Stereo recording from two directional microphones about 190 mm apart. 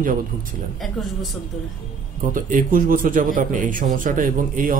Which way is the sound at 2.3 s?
45° right (ahead or behind).